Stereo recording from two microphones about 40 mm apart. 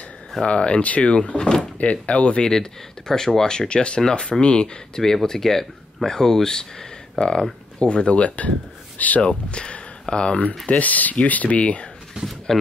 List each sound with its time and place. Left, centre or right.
0.4 s speech: left
2.4 s speech: centre; by 8.5 s left
8.9 s speech: left
9.3 s speech: left
10.7 s speech: left
12.5 s speech: centre